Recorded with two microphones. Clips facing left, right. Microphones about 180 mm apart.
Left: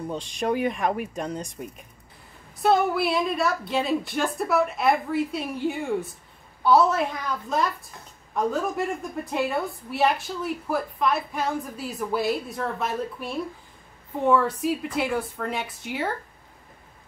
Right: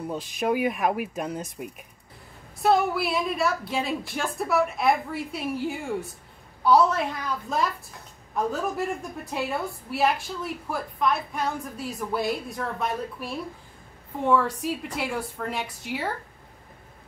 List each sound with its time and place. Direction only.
0.1 s a woman's voice: 5° right (ahead or behind)
8.7 s a woman's voice: centre (ahead or behind)